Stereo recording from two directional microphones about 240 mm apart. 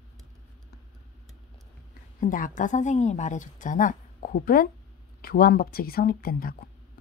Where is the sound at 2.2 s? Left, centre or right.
Left.